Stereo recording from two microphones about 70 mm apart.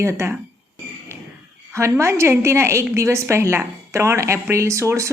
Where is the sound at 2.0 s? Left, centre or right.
Right.